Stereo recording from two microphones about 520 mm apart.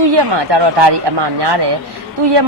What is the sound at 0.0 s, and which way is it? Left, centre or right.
A woman's voice, right.